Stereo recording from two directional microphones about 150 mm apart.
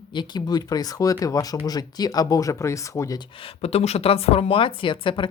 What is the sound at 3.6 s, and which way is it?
Speech, 45° left (ahead or behind).